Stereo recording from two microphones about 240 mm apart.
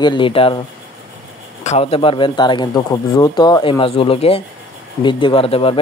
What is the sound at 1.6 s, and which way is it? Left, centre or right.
Speech, left.